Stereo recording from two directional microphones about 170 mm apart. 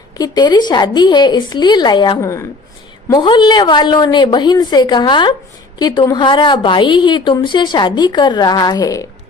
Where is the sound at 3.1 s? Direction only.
25° left (ahead or behind).